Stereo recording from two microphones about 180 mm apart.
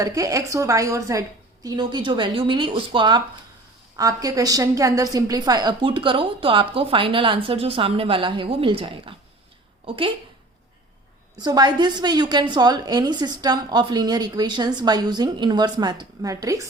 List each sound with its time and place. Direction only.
0.0 s a woman's voice: 20° right (ahead or behind)
11.3 s a woman's voice: 20° right (ahead or behind)